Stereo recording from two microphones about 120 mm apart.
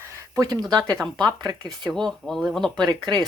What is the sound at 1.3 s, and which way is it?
Speech, 35° right (ahead or behind).